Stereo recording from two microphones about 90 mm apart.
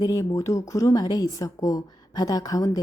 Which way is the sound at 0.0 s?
40° left (ahead or behind).